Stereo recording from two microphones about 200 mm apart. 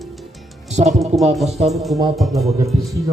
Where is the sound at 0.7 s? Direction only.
35° right (ahead or behind).